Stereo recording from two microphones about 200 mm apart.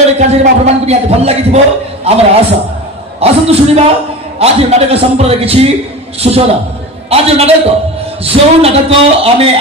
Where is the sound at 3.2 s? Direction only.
30° right (ahead or behind).